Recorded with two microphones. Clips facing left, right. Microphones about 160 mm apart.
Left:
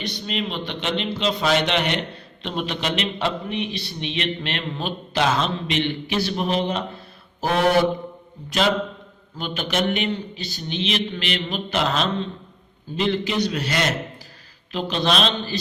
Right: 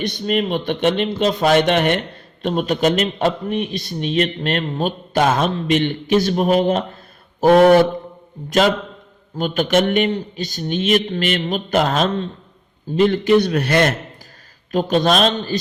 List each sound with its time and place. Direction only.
0.0 s a man's voice: 50° right (ahead or behind)